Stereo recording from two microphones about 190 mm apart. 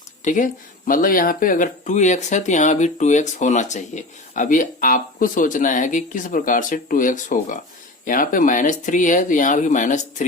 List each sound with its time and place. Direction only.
0.3 s speech: 45° left (ahead or behind)